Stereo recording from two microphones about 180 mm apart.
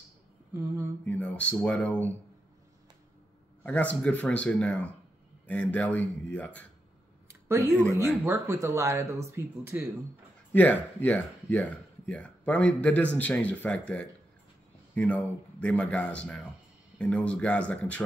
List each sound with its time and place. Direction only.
1.0 s speech: 10° left (ahead or behind)
3.6 s speech: 10° left (ahead or behind)
7.4 s speech: 15° right (ahead or behind)
10.5 s speech: 10° left (ahead or behind)